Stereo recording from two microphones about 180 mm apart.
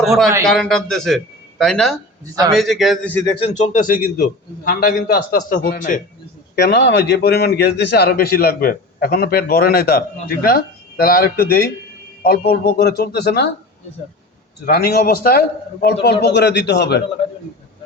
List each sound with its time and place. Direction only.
0.4 s a man's voice: 5° left (ahead or behind)
3.2 s a man's voice: 30° left (ahead or behind); by 6.0 s 50° left (ahead or behind)
6.6 s a man's voice: 70° left (ahead or behind)
14.7 s a man's voice: 60° left (ahead or behind)